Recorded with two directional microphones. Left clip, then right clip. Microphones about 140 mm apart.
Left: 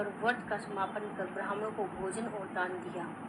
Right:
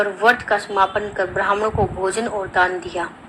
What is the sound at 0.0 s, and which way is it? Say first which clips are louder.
A woman's voice: right 17 dB; 90° right.